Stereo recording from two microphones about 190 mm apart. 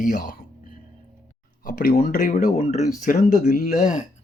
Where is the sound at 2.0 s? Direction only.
45° left (ahead or behind).